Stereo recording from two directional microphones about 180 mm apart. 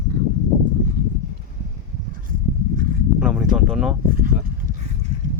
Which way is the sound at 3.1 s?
5° right (ahead or behind).